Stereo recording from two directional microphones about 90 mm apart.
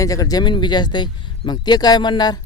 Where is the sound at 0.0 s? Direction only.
40° left (ahead or behind).